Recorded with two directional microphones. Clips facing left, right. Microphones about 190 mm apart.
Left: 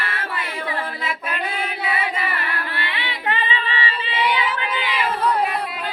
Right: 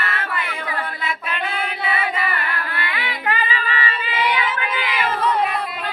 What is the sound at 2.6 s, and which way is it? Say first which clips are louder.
Female singing: right 1 dB; 25° left (ahead or behind).